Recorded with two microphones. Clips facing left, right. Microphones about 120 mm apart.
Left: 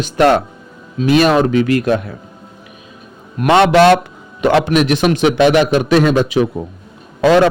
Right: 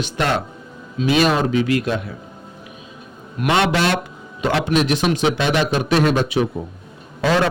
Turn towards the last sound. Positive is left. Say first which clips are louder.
# left 8 dB
turn(degrees=80)